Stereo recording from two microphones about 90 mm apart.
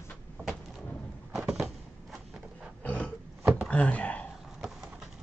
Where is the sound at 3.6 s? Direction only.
15° left (ahead or behind).